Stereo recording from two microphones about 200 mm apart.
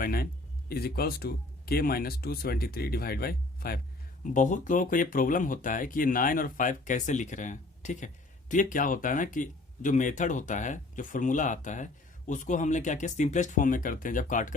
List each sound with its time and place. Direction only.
0.0 s speech: 50° left (ahead or behind)